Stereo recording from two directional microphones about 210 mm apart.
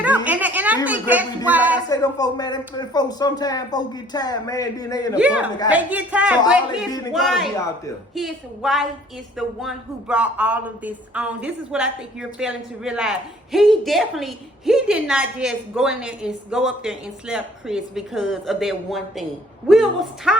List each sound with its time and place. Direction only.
0.3 s a sound: 5° right (ahead or behind)
0.9 s speech: 10° right (ahead or behind)
1.9 s speech: 15° left (ahead or behind)
5.1 s speech: 5° right (ahead or behind)